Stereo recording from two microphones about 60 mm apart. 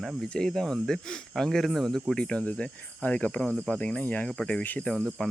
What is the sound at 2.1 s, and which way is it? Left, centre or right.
Speech, centre.